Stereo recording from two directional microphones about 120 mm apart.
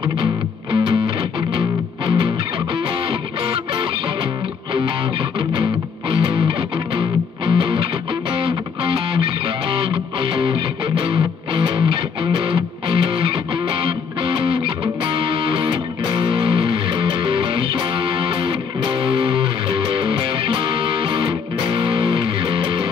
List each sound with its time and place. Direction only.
0.0 s music: 45° right (ahead or behind)
5.5 s music: 50° right (ahead or behind)